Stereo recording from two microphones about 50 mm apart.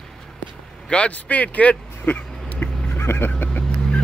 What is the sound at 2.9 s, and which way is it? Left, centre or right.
Vehicle, left.